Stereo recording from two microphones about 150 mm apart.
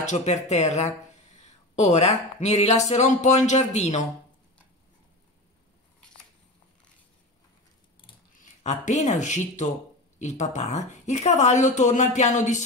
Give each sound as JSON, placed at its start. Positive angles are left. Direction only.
{"t": 0.0, "sound": "speech", "side_deg": 50}
{"t": 8.4, "sound": "speech", "side_deg": 55}